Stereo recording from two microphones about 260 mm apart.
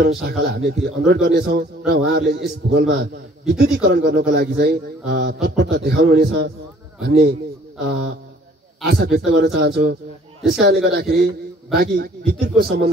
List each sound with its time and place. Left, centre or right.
0.0 s a man's voice: right
8.8 s a man's voice: right